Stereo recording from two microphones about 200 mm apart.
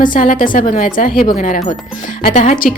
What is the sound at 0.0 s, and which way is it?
A woman's voice, 40° left (ahead or behind).